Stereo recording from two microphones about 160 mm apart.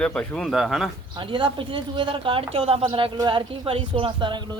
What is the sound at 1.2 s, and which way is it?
A woman's voice, 30° right (ahead or behind).